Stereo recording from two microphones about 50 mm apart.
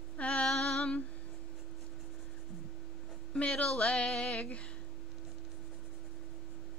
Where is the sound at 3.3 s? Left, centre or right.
Centre.